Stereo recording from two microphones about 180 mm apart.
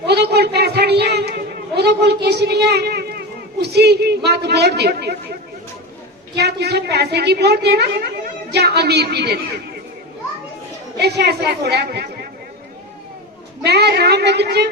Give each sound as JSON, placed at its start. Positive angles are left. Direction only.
{"t": 0.1, "sound": "a sound", "side_deg": -65}
{"t": 6.3, "sound": "a woman's voice", "side_deg": -65}
{"t": 10.9, "sound": "a woman's voice", "side_deg": -65}
{"t": 13.7, "sound": "a woman's voice", "side_deg": -65}